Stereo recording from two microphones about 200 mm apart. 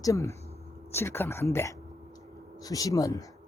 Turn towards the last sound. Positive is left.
turn(degrees=15)  # may be behind; listen again after turning